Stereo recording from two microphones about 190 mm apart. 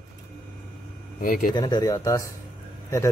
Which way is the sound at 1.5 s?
20° left (ahead or behind).